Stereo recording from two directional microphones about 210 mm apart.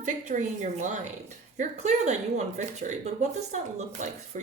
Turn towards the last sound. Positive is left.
turn(degrees=-35)  # may be behind; listen again after turning